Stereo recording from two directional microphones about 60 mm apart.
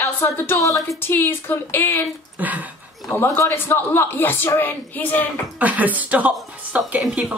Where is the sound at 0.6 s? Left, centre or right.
Left.